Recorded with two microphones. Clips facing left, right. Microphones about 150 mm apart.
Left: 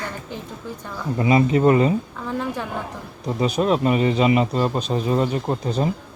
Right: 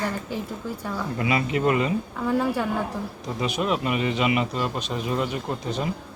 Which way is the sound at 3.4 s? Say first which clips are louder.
Left 6 dB; 35° left (ahead or behind).